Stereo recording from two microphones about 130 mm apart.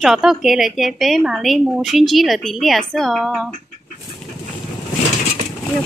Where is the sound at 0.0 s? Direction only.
5° right (ahead or behind).